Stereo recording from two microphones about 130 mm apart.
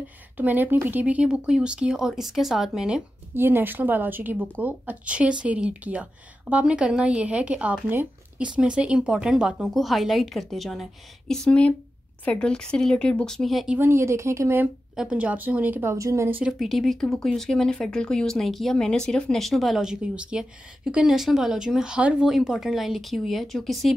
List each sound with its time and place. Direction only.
0.4 s speech: 15° right (ahead or behind)
3.3 s speech: 15° right (ahead or behind); by 13.7 s centre (ahead or behind)
13.7 s speech: 20° right (ahead or behind)
15.0 s speech: 10° right (ahead or behind)
16.5 s speech: centre (ahead or behind)